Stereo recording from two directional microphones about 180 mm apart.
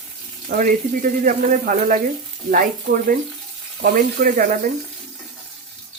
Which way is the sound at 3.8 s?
55° right (ahead or behind).